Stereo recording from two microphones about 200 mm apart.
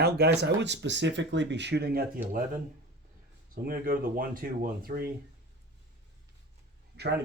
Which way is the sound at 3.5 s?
45° right (ahead or behind).